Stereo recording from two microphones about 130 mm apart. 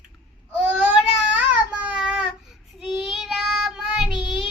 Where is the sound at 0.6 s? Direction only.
10° right (ahead or behind).